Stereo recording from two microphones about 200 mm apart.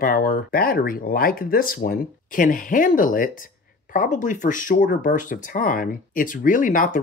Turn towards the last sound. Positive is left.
turn(degrees=40)  # may be behind; listen again after turning